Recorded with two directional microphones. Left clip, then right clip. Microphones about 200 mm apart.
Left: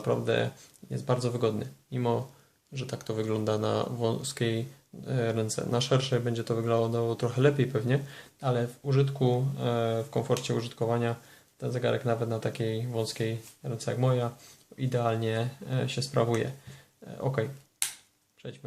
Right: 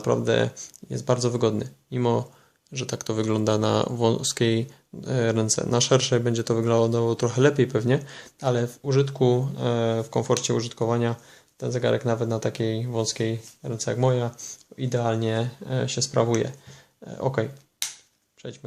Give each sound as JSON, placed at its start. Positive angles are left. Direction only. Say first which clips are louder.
{"t": 0.0, "sound": "speech", "louder": "right 5 dB", "side_deg": -45}